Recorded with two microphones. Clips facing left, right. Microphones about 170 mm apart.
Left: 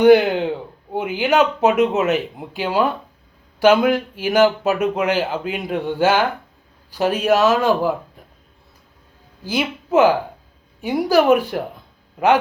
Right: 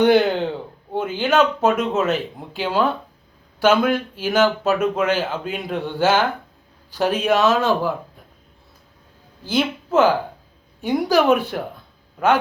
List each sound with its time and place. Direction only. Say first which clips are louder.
0.0 s speech: left 3 dB; 10° left (ahead or behind)
9.4 s a woman's voice: right 1 dB; 10° left (ahead or behind)